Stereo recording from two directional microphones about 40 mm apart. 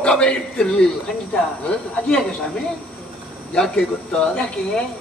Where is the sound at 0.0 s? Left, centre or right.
Left.